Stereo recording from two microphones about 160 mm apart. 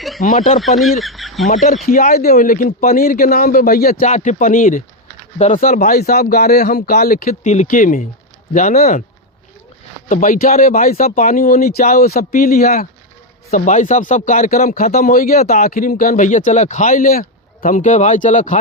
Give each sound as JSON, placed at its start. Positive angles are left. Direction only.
{"t": 0.2, "sound": "speech", "side_deg": 60}
{"t": 0.8, "sound": "speech", "side_deg": 0}
{"t": 1.5, "sound": "speech", "side_deg": 50}
{"t": 1.9, "sound": "speech", "side_deg": 60}
{"t": 4.0, "sound": "speech", "side_deg": 45}
{"t": 10.1, "sound": "speech", "side_deg": 55}
{"t": 13.5, "sound": "speech", "side_deg": 50}